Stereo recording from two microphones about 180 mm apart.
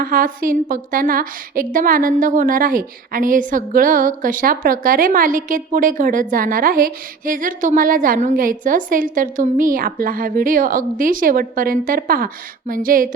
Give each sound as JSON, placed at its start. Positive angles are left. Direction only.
{"t": 0.0, "sound": "a woman's voice", "side_deg": -55}